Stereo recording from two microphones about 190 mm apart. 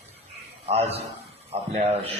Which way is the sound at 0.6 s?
35° right (ahead or behind).